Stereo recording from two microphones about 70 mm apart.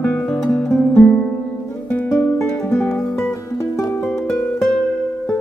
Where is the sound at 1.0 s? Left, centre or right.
Centre.